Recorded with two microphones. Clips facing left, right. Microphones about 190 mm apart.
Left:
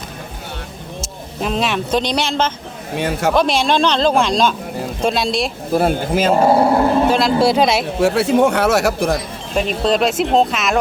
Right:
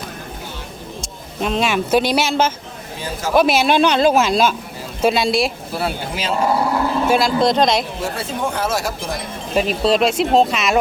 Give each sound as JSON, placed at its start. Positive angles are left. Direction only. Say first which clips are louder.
{"t": 1.4, "sound": "speech", "louder": "right 1 dB", "side_deg": 0}
{"t": 2.9, "sound": "speech", "louder": "left 7 dB", "side_deg": 65}
{"t": 3.3, "sound": "a man's voice", "louder": "right 5 dB", "side_deg": -5}
{"t": 5.7, "sound": "speech", "louder": "left 8 dB", "side_deg": 50}
{"t": 6.4, "sound": "speech", "louder": "left 3 dB", "side_deg": 30}
{"t": 7.1, "sound": "speech", "louder": "left 1 dB", "side_deg": 0}
{"t": 8.0, "sound": "speech", "louder": "left 10 dB", "side_deg": 70}
{"t": 9.6, "sound": "speech", "louder": "even", "side_deg": -5}